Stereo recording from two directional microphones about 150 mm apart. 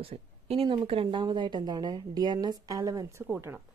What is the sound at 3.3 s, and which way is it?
Speech, 15° right (ahead or behind).